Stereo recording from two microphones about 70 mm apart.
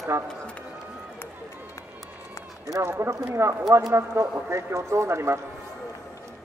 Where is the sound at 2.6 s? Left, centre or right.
Right.